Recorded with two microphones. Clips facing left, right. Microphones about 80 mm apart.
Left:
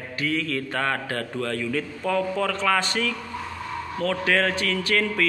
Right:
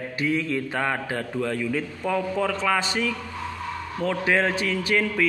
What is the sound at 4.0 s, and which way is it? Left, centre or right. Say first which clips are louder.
Mantra: even; centre.